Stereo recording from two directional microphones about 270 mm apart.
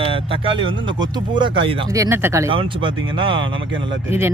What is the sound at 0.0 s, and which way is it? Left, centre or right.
Speech, centre.